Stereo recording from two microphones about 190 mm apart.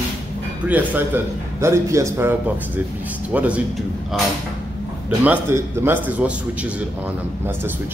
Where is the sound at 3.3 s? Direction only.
5° right (ahead or behind).